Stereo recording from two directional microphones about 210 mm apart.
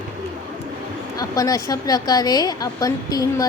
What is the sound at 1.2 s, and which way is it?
Speech, 15° left (ahead or behind).